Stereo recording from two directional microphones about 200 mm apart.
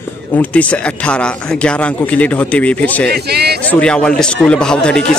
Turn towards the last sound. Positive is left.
turn(degrees=5)  # may be behind; listen again after turning